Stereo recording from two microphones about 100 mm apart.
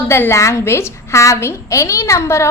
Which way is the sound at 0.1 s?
25° left (ahead or behind).